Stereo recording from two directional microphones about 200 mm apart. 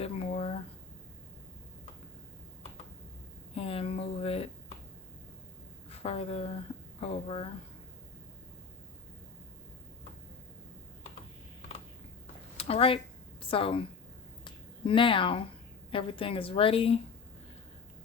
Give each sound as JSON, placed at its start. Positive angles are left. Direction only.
{"t": 0.0, "sound": "a sound", "side_deg": 30}
{"t": 3.5, "sound": "a woman's voice", "side_deg": 30}
{"t": 5.9, "sound": "a woman's voice", "side_deg": 30}
{"t": 12.5, "sound": "a woman's voice", "side_deg": 30}
{"t": 14.4, "sound": "a sound", "side_deg": 25}
{"t": 15.9, "sound": "a woman's voice", "side_deg": 25}